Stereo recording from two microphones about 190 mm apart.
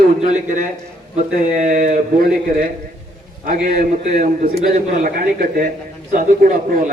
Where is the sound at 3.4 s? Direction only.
50° right (ahead or behind).